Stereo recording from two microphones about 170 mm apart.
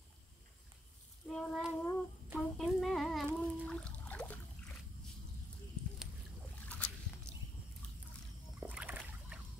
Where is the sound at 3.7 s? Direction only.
5° left (ahead or behind).